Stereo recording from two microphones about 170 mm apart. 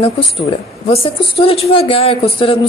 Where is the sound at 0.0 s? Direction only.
35° left (ahead or behind).